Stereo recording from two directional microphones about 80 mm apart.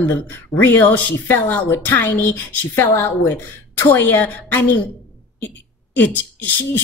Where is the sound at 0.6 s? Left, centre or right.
Left.